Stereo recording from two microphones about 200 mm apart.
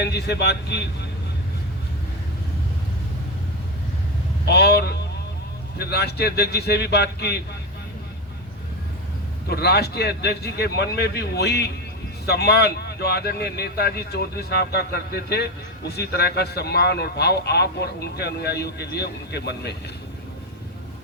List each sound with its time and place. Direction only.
0.0 s speech: 55° left (ahead or behind)
4.4 s a man's voice: 55° left (ahead or behind)
9.5 s a man's voice: 55° left (ahead or behind)